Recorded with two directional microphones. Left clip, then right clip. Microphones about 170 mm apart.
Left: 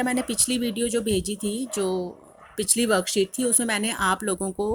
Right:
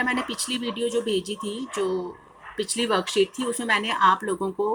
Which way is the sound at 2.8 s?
80° left.